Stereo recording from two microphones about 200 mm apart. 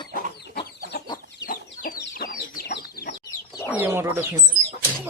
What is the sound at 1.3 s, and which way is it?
Chicken, 45° left (ahead or behind).